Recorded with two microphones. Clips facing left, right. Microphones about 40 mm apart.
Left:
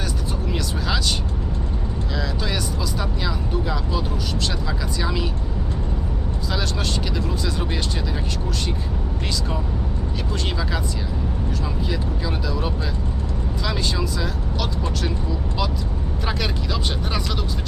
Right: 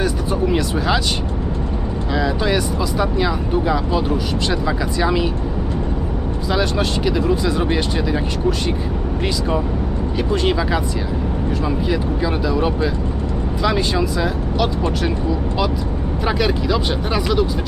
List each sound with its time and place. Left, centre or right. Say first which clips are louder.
0.0 s vehicle: right 9 dB; centre
2.1 s speech: right 9 dB; right
6.5 s speech: right 7 dB; centre
10.3 s speech: right 9 dB; centre
16.2 s speech: right 8 dB; centre